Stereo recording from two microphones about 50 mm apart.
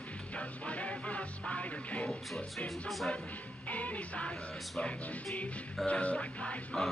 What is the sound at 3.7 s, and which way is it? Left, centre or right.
Speech, left.